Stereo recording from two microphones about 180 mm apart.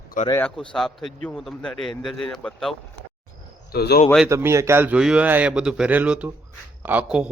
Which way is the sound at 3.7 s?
60° left (ahead or behind).